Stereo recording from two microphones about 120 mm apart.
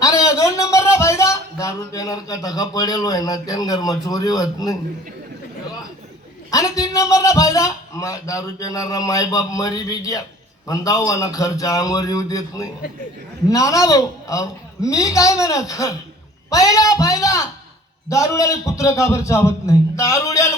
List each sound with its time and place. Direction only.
0.0 s a man's voice: 25° left (ahead or behind)
6.5 s a man's voice: 30° left (ahead or behind)